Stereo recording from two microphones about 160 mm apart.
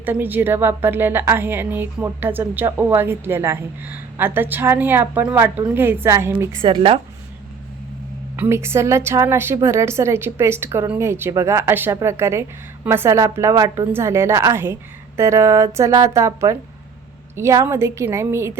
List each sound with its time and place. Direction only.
0.0 s a woman's voice: 10° right (ahead or behind)
6.6 s speech: 35° right (ahead or behind)
8.4 s a woman's voice: 15° right (ahead or behind)